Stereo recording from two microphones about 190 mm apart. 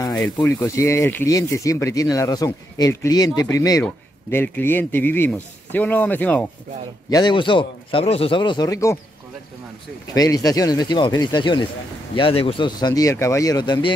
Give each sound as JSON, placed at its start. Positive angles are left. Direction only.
{"t": 0.4, "sound": "speech", "side_deg": 15}
{"t": 7.1, "sound": "speech", "side_deg": 20}
{"t": 10.1, "sound": "speech", "side_deg": 20}